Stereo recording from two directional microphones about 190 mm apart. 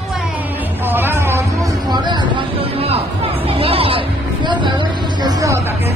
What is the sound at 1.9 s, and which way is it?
Chatter, 25° right (ahead or behind).